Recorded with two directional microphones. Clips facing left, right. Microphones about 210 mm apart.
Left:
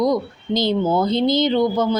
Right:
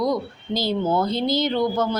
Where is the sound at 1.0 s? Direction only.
5° right (ahead or behind).